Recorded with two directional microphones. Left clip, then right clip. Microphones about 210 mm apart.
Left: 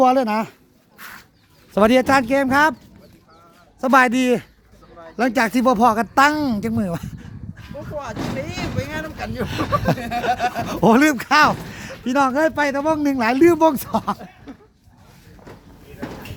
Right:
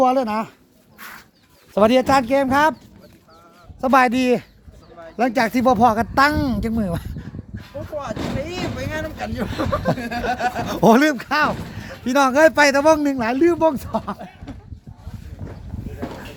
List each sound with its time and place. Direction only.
0.0 s speech: 25° left (ahead or behind)
0.9 s chicken: 5° right (ahead or behind)
1.7 s speech: 15° left (ahead or behind)
3.8 s speech: 15° left (ahead or behind); by 10.6 s 35° left (ahead or behind)
10.6 s speech: 10° left (ahead or behind)
12.0 s speech: 5° left (ahead or behind)
13.0 s speech: 10° left (ahead or behind)